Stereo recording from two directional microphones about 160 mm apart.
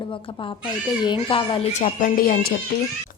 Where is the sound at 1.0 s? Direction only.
30° left (ahead or behind).